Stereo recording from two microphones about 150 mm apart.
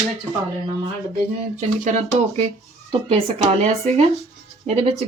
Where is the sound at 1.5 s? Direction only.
50° right (ahead or behind).